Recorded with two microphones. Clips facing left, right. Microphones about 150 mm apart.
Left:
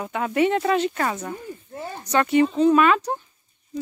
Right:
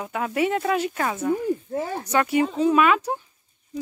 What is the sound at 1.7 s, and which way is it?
Speech, 90° right.